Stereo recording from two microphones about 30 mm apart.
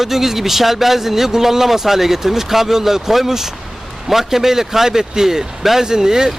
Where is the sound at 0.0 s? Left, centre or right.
Centre.